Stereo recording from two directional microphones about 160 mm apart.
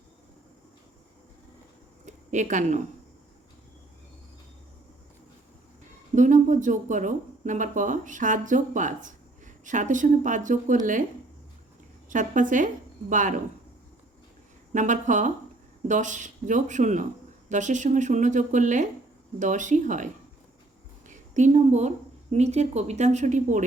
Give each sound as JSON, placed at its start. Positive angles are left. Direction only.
{"t": 2.0, "sound": "speech", "side_deg": -50}
{"t": 6.1, "sound": "speech", "side_deg": -50}
{"t": 12.0, "sound": "a woman's voice", "side_deg": -50}
{"t": 14.7, "sound": "speech", "side_deg": -50}
{"t": 21.1, "sound": "speech", "side_deg": -50}